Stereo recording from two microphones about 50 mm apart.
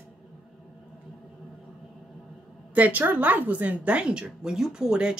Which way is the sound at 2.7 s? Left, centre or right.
Right.